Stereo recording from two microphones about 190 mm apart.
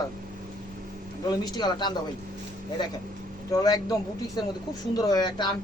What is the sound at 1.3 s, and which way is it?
Speech, 20° left (ahead or behind).